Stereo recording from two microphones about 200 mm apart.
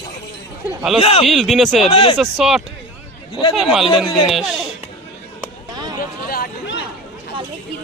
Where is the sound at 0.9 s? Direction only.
30° left (ahead or behind).